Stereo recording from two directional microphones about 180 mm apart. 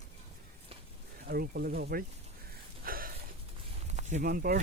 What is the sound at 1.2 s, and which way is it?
Speech, 60° right (ahead or behind).